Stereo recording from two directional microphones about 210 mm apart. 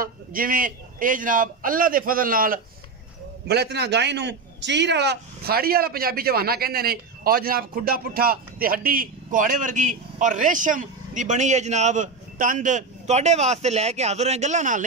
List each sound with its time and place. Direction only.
0.0 s a man's voice: 45° right (ahead or behind)